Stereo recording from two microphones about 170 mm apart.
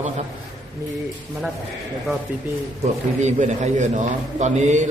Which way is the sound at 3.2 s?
45° right (ahead or behind).